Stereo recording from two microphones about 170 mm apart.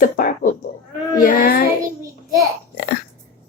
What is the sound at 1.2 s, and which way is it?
Child singing, 55° left (ahead or behind).